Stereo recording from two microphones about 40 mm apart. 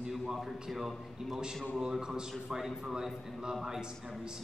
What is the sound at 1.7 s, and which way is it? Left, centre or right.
Speech, centre.